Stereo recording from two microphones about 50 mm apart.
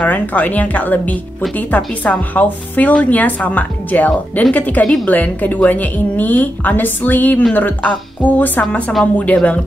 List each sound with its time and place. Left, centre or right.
0.0 s speech: left